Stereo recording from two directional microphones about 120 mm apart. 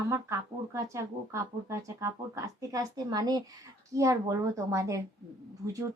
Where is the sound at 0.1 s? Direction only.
25° right (ahead or behind).